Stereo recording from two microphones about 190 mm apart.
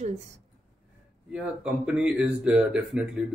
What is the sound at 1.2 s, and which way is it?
Speech, 5° right (ahead or behind).